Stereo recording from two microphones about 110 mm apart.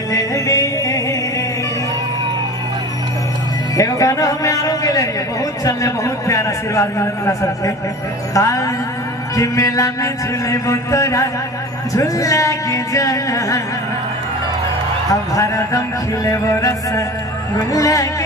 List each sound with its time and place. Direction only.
0.1 s music: 35° left (ahead or behind)
3.8 s a man's voice: 30° left (ahead or behind)
8.3 s a sound: 30° left (ahead or behind)
11.9 s a man's voice: 30° left (ahead or behind)
15.1 s a sound: 30° left (ahead or behind)
17.7 s a man's voice: 30° left (ahead or behind)